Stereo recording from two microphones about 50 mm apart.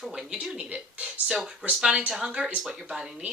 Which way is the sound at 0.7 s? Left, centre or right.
Right.